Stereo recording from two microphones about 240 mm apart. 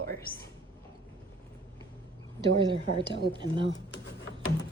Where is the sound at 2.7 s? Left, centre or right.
Centre.